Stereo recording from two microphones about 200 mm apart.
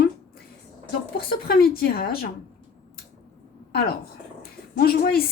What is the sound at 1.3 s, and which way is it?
A woman's voice, 50° left (ahead or behind).